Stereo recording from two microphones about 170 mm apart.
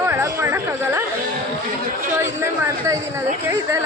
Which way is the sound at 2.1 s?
15° right (ahead or behind).